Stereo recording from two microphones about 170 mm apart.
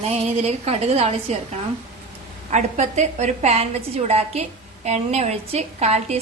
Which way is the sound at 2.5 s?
45° right (ahead or behind).